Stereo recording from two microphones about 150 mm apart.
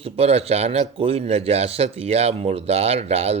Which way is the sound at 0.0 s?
40° right (ahead or behind).